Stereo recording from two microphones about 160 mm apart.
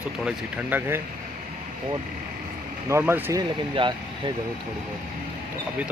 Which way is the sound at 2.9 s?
15° right (ahead or behind).